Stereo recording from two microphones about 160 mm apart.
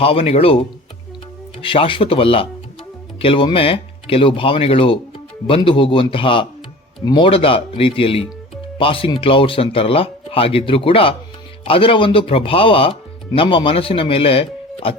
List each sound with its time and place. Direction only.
0.0 s speech: 35° left (ahead or behind)